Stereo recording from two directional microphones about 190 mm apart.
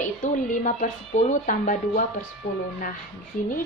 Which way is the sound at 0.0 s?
40° left (ahead or behind).